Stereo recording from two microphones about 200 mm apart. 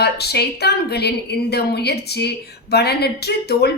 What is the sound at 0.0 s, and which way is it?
A woman's voice, 55° left (ahead or behind).